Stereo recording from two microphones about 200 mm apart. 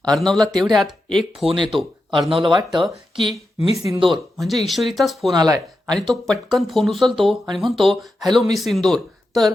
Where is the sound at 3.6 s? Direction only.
30° left (ahead or behind).